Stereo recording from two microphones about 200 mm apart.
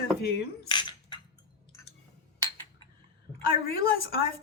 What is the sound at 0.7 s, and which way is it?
Cutlery, 25° left (ahead or behind).